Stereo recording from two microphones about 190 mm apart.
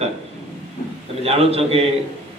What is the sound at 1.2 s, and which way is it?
Speech, 30° right (ahead or behind).